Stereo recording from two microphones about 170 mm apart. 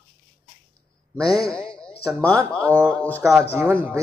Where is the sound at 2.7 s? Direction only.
10° right (ahead or behind).